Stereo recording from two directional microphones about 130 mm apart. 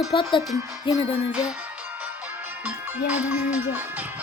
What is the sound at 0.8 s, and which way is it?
Music, 45° left (ahead or behind).